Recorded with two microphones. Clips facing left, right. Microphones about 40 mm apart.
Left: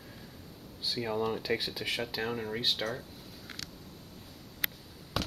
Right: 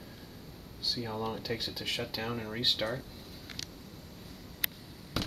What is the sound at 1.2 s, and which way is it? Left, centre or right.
Speech, centre.